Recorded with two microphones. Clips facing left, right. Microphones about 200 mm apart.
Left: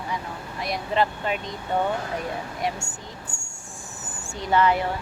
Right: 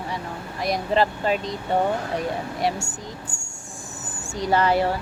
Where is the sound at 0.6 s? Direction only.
35° right (ahead or behind).